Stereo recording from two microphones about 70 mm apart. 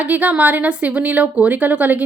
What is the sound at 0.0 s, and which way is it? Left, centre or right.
Speech, right.